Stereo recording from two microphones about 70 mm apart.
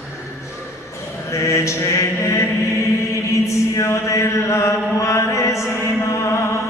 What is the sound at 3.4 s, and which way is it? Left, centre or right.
Chant, left.